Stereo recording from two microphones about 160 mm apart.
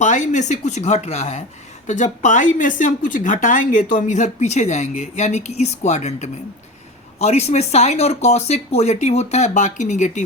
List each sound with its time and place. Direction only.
0.0 s speech: 50° left (ahead or behind)